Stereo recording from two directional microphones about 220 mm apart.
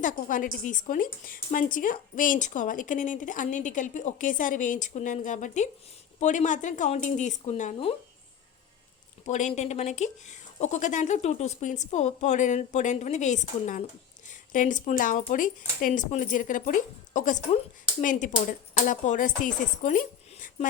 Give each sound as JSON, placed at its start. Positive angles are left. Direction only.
{"t": 0.0, "sound": "speech", "side_deg": 35}
{"t": 9.2, "sound": "speech", "side_deg": 30}
{"t": 19.8, "sound": "a sound", "side_deg": 35}